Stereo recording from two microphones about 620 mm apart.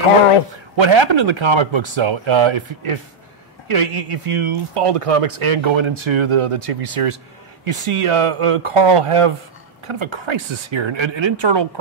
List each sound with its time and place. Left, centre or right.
0.7 s speech: right